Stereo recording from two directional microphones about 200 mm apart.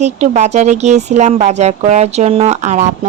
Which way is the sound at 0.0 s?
35° right (ahead or behind).